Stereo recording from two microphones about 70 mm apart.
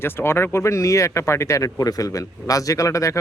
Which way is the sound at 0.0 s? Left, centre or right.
Left.